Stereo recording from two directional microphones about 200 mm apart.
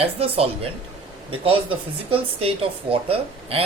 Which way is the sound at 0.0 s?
30° right (ahead or behind).